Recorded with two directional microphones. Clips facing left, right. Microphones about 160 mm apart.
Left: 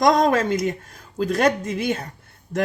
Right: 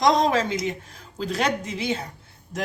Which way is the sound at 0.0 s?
50° left (ahead or behind).